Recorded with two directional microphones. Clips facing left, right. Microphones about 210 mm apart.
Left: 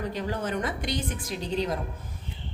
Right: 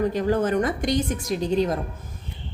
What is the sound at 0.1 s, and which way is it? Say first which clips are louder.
A woman's voice: right 8 dB; 45° right (ahead or behind).